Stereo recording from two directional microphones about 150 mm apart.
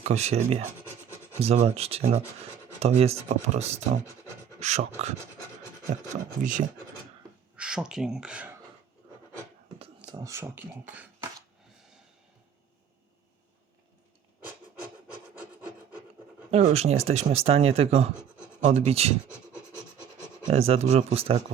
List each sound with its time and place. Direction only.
0.0 s speech: 50° right (ahead or behind)
6.4 s speech: 60° right (ahead or behind)
7.5 s speech: 5° right (ahead or behind)
10.1 s speech: 25° right (ahead or behind)
16.5 s speech: 45° right (ahead or behind)
20.5 s speech: 40° right (ahead or behind)